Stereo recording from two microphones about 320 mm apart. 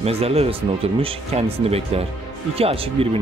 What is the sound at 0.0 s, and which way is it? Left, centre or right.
Speech, centre.